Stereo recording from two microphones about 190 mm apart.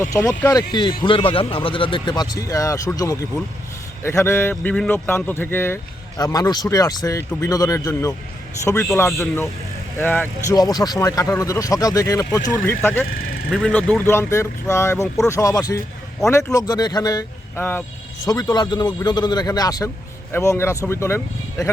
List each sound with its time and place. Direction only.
0.0 s a man's voice: 15° left (ahead or behind)
18.3 s a man's voice: 20° left (ahead or behind)